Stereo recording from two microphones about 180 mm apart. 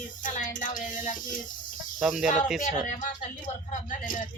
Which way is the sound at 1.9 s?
Centre (ahead or behind).